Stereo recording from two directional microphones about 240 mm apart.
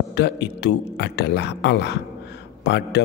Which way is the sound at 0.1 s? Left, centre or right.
Left.